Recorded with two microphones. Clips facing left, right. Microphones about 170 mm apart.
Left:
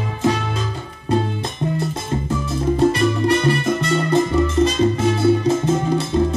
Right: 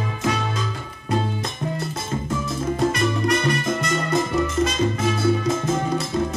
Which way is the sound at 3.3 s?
30° left (ahead or behind).